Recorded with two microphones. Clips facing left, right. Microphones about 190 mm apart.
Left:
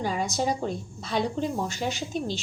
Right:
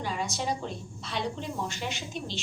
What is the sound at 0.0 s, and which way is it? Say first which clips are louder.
A woman's voice: left 5 dB; 45° left (ahead or behind).